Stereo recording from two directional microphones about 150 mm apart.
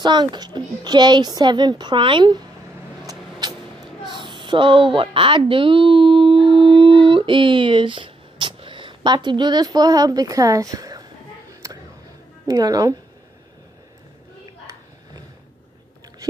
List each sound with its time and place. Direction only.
0.0 s a woman's voice: 30° right (ahead or behind)
3.1 s vehicle: 25° right (ahead or behind)
4.1 s a woman's voice: 30° right (ahead or behind)
11.6 s a sound: 20° right (ahead or behind)
12.4 s a woman's voice: 25° right (ahead or behind)